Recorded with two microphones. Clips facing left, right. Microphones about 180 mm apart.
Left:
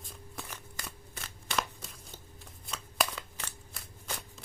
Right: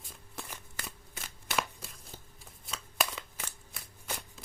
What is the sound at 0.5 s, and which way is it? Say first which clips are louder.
Shuffling cards: even; 5° right (ahead or behind).